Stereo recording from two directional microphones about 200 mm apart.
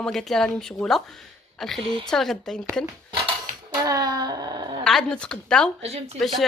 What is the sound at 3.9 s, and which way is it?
Wail, 20° right (ahead or behind).